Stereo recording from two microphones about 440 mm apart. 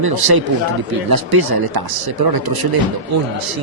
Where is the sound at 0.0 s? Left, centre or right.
Right.